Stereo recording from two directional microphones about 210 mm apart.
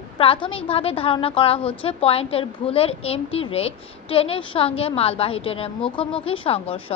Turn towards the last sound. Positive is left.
turn(degrees=25)  # may be behind; listen again after turning